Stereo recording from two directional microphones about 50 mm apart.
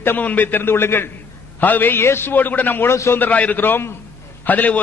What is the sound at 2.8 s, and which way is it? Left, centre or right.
Speech, left.